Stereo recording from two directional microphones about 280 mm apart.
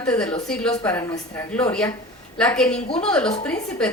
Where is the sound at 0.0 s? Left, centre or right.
Centre.